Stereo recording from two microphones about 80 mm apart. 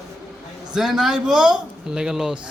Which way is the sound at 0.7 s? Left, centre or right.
Centre.